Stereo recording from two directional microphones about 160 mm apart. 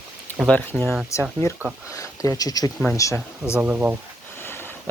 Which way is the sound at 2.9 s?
20° left (ahead or behind).